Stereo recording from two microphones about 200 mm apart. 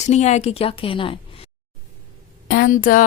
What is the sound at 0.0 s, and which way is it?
A woman's voice, 35° left (ahead or behind).